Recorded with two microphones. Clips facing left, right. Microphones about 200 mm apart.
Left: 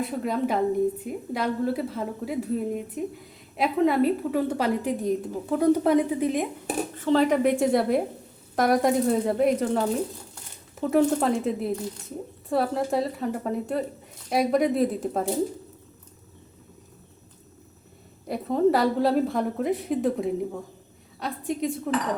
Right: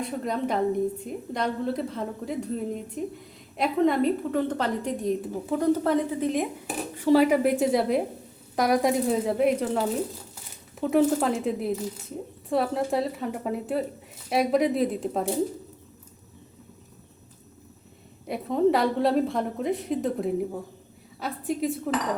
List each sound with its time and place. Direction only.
0.0 s a woman's voice: 5° left (ahead or behind)
6.9 s a woman's voice: 10° right (ahead or behind)
18.3 s a woman's voice: centre (ahead or behind)